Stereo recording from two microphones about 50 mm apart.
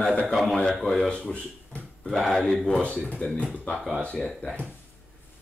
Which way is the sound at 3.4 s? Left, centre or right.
Left.